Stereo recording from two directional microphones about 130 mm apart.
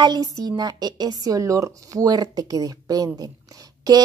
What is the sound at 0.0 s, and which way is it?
A woman's voice, 30° right (ahead or behind).